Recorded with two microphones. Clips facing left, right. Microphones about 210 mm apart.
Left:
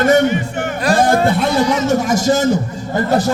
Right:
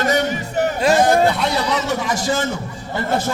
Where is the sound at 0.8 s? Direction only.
20° right (ahead or behind).